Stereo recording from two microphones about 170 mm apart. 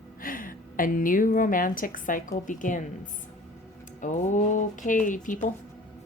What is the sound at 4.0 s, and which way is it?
A woman's voice, 45° left (ahead or behind).